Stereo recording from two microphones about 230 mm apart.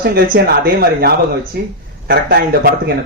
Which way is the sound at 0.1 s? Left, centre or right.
Right.